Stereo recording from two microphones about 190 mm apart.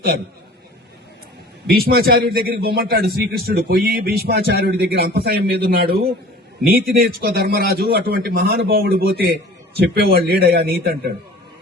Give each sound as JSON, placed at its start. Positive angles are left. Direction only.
{"t": 1.6, "sound": "a man's voice", "side_deg": -55}